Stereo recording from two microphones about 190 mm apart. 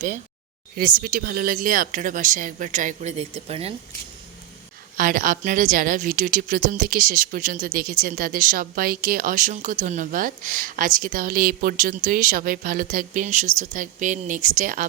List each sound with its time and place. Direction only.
0.8 s a woman's voice: 50° right (ahead or behind); by 3.8 s 30° right (ahead or behind)
4.9 s a woman's voice: 45° right (ahead or behind)